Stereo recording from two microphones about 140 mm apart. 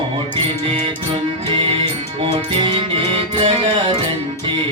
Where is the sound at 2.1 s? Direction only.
35° right (ahead or behind).